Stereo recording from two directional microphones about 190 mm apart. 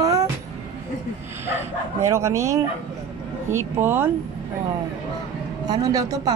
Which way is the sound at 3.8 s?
10° right (ahead or behind).